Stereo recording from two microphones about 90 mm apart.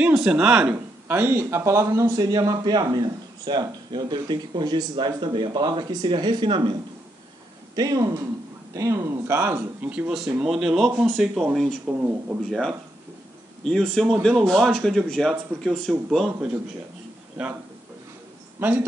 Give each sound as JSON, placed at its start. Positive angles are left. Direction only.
{"t": 0.0, "sound": "speech", "side_deg": -10}
{"t": 1.0, "sound": "speech", "side_deg": -25}
{"t": 7.7, "sound": "speech", "side_deg": -45}
{"t": 8.7, "sound": "speech", "side_deg": -30}
{"t": 9.4, "sound": "speech", "side_deg": -20}
{"t": 11.8, "sound": "speech", "side_deg": -20}
{"t": 12.4, "sound": "speech", "side_deg": 5}
{"t": 18.6, "sound": "speech", "side_deg": -20}